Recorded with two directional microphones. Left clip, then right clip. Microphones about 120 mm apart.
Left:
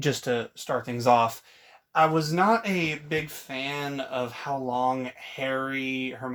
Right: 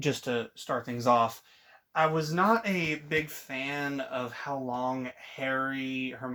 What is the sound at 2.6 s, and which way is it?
Speech, 15° left (ahead or behind).